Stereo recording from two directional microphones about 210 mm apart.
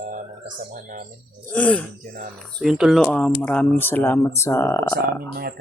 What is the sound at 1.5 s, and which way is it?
Speech, 5° left (ahead or behind).